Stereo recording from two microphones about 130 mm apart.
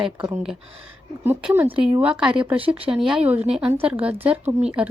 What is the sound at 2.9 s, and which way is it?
A woman's voice, 5° right (ahead or behind).